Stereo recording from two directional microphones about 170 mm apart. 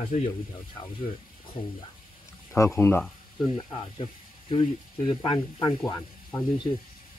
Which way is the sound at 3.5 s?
30° left (ahead or behind).